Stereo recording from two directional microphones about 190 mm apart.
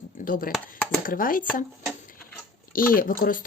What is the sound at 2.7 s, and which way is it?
Speech, 50° left (ahead or behind).